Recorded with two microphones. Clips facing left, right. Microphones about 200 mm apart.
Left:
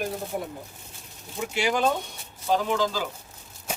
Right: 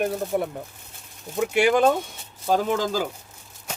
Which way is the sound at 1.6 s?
55° right (ahead or behind).